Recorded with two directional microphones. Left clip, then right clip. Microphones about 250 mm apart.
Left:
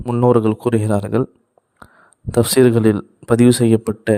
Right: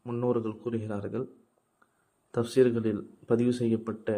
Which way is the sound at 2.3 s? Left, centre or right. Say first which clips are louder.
Left 11 dB; left.